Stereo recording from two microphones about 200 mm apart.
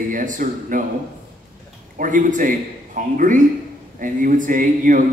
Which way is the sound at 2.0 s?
40° right (ahead or behind).